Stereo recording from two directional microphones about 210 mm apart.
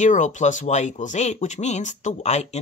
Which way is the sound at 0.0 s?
35° left (ahead or behind).